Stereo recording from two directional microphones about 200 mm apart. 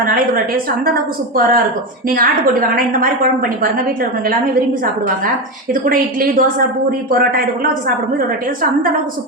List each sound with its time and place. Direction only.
0.0 s a woman's voice: 45° right (ahead or behind)
5.7 s a woman's voice: 45° right (ahead or behind)